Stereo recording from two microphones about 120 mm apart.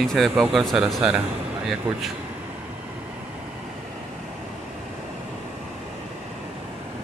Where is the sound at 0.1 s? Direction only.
Centre (ahead or behind).